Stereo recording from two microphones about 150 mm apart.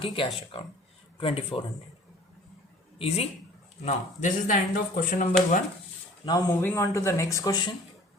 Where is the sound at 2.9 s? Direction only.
40° left (ahead or behind).